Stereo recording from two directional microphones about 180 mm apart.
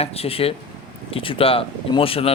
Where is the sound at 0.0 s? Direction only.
30° left (ahead or behind).